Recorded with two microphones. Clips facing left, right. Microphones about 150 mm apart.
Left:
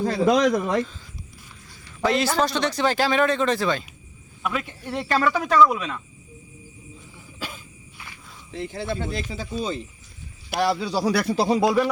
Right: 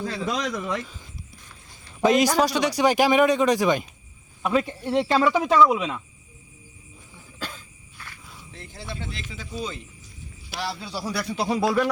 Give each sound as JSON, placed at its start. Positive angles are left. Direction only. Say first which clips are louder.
{"t": 0.0, "sound": "speech", "louder": "left 9 dB", "side_deg": 45}
{"t": 2.0, "sound": "a man's voice", "louder": "right 3 dB", "side_deg": -15}
{"t": 4.4, "sound": "speech", "louder": "right 5 dB", "side_deg": -35}
{"t": 7.3, "sound": "walk", "louder": "even", "side_deg": 10}
{"t": 8.5, "sound": "speech", "louder": "left 9 dB", "side_deg": 70}
{"t": 10.5, "sound": "speech", "louder": "left 9 dB", "side_deg": 60}
{"t": 11.3, "sound": "speech", "louder": "even", "side_deg": 25}